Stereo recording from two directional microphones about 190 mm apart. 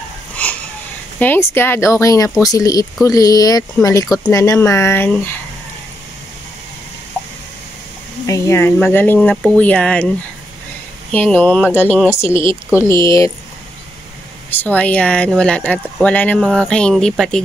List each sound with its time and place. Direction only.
0.4 s wheeze: 5° left (ahead or behind)
1.2 s speech: 10° left (ahead or behind)
8.3 s speech: 15° left (ahead or behind)
11.1 s speech: 5° left (ahead or behind)
14.5 s speech: 10° left (ahead or behind)